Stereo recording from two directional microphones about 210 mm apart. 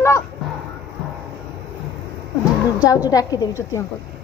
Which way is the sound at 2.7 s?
15° left (ahead or behind).